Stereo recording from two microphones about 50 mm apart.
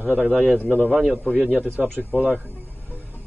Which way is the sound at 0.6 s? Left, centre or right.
Left.